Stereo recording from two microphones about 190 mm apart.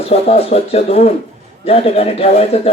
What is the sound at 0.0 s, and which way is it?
A man's voice, 35° left (ahead or behind).